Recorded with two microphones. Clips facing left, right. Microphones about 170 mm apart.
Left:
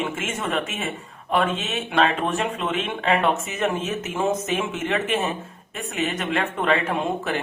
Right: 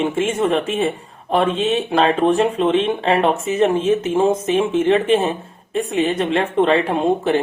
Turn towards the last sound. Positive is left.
turn(degrees=-30)  # may be behind; listen again after turning